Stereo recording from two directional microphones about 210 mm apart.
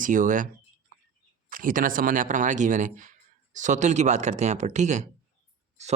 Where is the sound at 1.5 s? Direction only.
40° right (ahead or behind).